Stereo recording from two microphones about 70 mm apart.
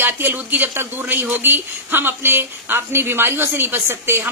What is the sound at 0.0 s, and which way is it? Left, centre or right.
Speech, right.